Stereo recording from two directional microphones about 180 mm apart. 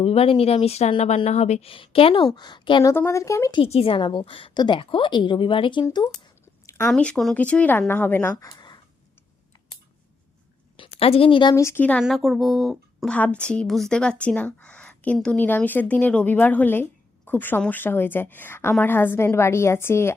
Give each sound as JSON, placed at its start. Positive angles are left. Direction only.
{"t": 0.0, "sound": "speech", "side_deg": 35}
{"t": 2.9, "sound": "speech", "side_deg": 15}
{"t": 3.6, "sound": "a woman's voice", "side_deg": 30}
{"t": 6.7, "sound": "a sound", "side_deg": 15}
{"t": 6.9, "sound": "speech", "side_deg": 5}
{"t": 11.0, "sound": "a woman's voice", "side_deg": 30}